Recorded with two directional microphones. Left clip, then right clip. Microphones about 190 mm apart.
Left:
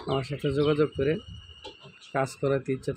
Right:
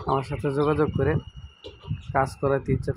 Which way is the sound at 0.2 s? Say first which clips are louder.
Right 3 dB; centre (ahead or behind).